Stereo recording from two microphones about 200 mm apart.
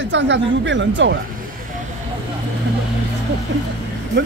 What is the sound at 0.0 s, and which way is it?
Speech, 65° right (ahead or behind).